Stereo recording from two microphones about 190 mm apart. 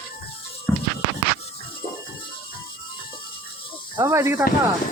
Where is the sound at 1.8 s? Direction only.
25° left (ahead or behind).